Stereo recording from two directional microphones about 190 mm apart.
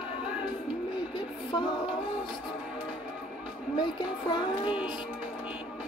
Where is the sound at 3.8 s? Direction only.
25° left (ahead or behind).